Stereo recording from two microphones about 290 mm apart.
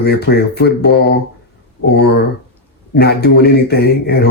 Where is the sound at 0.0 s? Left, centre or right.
Left.